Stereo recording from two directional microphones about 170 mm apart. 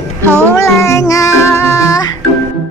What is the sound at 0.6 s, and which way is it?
Music, 15° left (ahead or behind).